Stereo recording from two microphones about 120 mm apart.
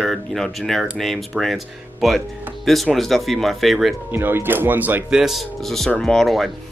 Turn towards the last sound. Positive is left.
turn(degrees=0)  # may be behind; listen again after turning